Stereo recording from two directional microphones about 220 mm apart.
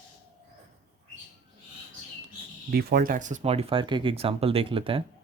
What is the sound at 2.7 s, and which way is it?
Speech, 45° right (ahead or behind).